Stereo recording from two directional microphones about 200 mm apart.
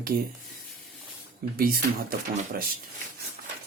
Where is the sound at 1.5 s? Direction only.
45° right (ahead or behind).